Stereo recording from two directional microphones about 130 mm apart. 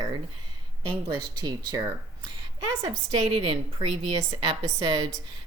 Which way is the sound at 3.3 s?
40° right (ahead or behind).